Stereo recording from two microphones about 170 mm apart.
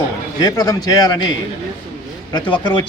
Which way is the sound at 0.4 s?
20° left (ahead or behind).